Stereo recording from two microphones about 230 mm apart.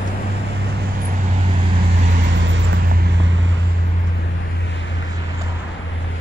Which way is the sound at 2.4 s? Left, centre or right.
Right.